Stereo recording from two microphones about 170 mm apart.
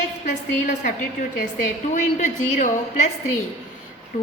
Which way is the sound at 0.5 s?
45° left (ahead or behind).